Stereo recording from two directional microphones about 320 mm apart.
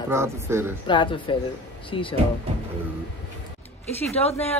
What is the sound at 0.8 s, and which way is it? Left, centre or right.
Speech, centre.